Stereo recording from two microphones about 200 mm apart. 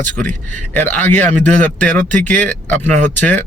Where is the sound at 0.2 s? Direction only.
35° right (ahead or behind).